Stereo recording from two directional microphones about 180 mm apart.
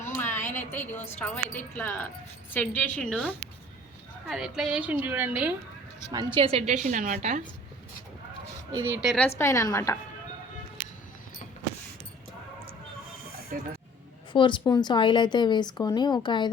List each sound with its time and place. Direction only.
0.2 s a woman's voice: 10° left (ahead or behind); by 5.5 s 10° right (ahead or behind)
6.1 s a woman's voice: 25° right (ahead or behind)
6.8 s a woman's voice: 45° right (ahead or behind)
8.7 s a woman's voice: 10° right (ahead or behind)
9.4 s a woman's voice: 15° left (ahead or behind)
14.3 s speech: 25° left (ahead or behind)